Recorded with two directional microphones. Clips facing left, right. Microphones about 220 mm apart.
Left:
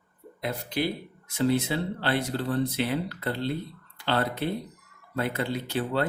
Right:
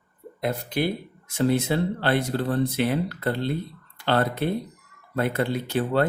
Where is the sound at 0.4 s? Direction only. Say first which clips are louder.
Right 4 dB; 50° right (ahead or behind).